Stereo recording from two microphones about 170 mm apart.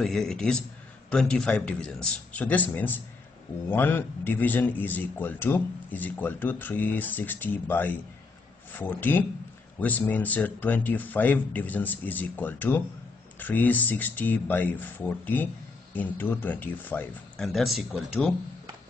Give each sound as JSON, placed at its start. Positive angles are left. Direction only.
{"t": 0.0, "sound": "a man's voice", "side_deg": 0}
{"t": 17.5, "sound": "speech", "side_deg": 0}